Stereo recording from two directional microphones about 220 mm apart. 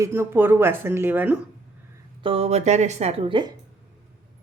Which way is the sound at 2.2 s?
25° right (ahead or behind).